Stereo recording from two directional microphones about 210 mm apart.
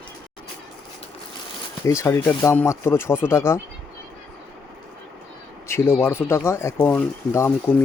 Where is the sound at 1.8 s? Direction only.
15° left (ahead or behind).